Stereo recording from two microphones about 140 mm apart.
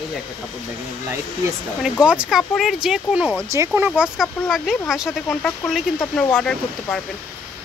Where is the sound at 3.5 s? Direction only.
20° right (ahead or behind).